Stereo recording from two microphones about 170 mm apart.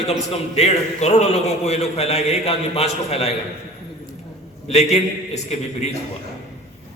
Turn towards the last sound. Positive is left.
turn(degrees=40)  # may be behind; listen again after turning